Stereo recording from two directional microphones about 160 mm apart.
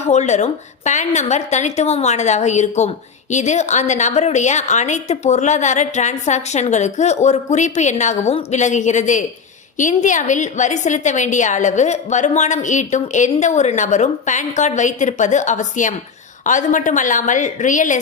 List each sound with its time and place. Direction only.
0.0 s a woman's voice: 45° left (ahead or behind)